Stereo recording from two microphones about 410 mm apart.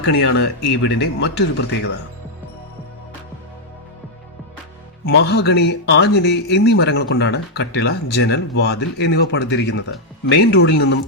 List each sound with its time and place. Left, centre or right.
0.1 s speech: left
5.1 s speech: left